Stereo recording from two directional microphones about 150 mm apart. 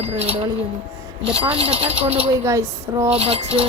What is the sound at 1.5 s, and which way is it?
Speech, 40° right (ahead or behind).